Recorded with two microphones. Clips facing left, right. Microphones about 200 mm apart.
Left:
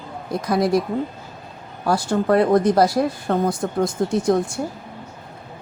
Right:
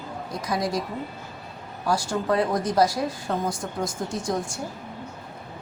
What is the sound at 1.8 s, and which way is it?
Speech, 60° left (ahead or behind).